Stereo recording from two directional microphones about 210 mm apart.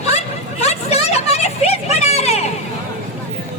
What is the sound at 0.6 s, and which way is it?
Vehicle, 30° left (ahead or behind).